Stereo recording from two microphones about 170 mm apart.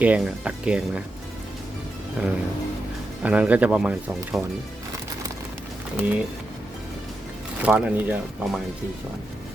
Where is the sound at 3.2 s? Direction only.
10° right (ahead or behind).